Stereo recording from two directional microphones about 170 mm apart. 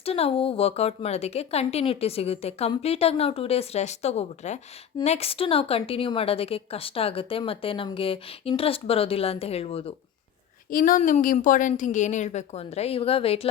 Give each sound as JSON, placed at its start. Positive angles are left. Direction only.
{"t": 0.0, "sound": "a woman's voice", "side_deg": 35}
{"t": 10.7, "sound": "a woman's voice", "side_deg": 55}